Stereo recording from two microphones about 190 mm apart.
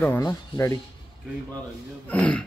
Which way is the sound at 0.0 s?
15° left (ahead or behind).